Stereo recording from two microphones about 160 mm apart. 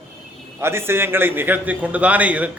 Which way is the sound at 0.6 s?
15° right (ahead or behind).